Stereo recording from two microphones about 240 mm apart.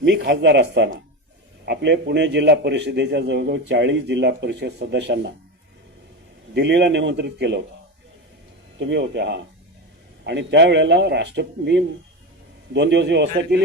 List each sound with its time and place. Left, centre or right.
0.0 s a man's voice: right
6.5 s a man's voice: right
8.8 s a man's voice: right